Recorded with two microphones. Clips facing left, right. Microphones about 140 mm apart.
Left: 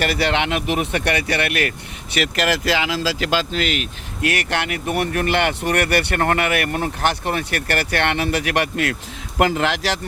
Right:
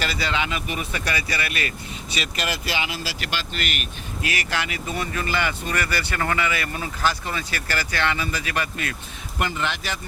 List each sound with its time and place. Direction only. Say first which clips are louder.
0.0 s speech: left 6 dB; 65° left (ahead or behind); by 3.2 s 90° left
3.8 s speech: left 6 dB; 70° left (ahead or behind)
9.4 s speech: left 8 dB; 90° left